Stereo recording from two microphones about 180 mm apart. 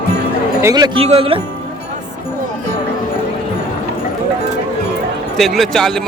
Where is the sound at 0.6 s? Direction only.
20° right (ahead or behind).